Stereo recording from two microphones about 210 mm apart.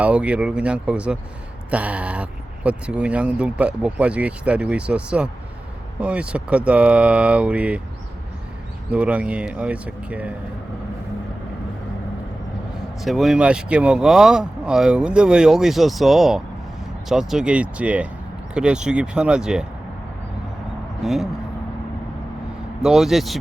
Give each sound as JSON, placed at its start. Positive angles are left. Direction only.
{"t": 0.0, "sound": "speech", "side_deg": -5}
{"t": 8.9, "sound": "speech", "side_deg": -5}
{"t": 13.0, "sound": "speech", "side_deg": 0}
{"t": 21.0, "sound": "speech", "side_deg": 0}
{"t": 22.8, "sound": "speech", "side_deg": 0}